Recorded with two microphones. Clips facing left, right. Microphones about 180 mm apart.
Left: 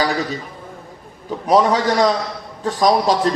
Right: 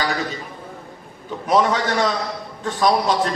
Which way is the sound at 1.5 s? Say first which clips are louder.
Left 3 dB; 35° left (ahead or behind).